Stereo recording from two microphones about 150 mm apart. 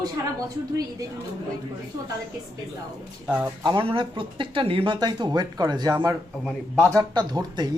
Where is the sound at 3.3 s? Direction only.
10° right (ahead or behind).